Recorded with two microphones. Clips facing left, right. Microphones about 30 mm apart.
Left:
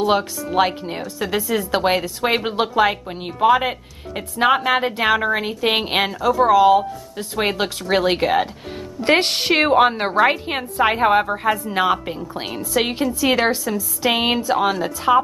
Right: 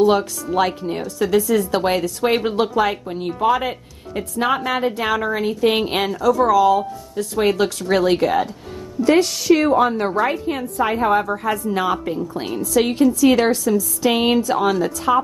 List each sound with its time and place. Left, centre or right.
0.0 s a woman's voice: left
9.0 s a woman's voice: left; by 15.2 s centre